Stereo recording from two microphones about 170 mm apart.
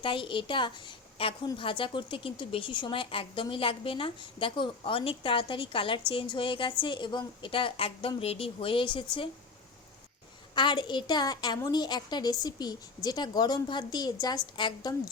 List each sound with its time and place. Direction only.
0.0 s a woman's voice: 30° left (ahead or behind)
10.5 s a woman's voice: 25° left (ahead or behind)